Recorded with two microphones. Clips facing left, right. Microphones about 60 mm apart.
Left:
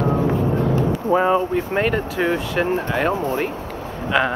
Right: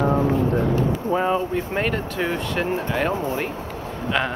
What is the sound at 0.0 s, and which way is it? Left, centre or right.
Vehicle, centre.